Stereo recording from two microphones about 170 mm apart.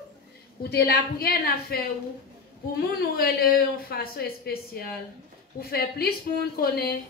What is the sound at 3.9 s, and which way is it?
Speech, 65° left (ahead or behind).